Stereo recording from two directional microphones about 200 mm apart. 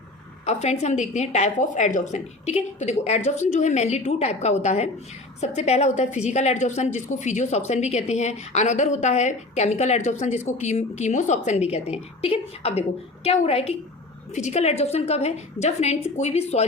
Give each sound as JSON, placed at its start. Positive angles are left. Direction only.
{"t": 0.4, "sound": "a woman's voice", "side_deg": 35}